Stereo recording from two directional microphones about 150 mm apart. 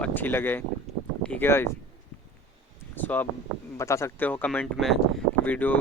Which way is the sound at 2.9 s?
10° left (ahead or behind).